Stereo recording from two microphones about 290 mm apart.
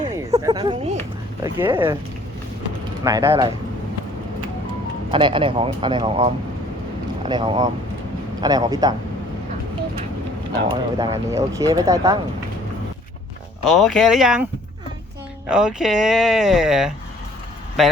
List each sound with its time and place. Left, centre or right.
0.0 s a sound: centre
1.5 s speech: centre
3.0 s speech: centre
5.1 s speech: centre
10.7 s speech: centre
13.7 s speech: centre
15.4 s speech: centre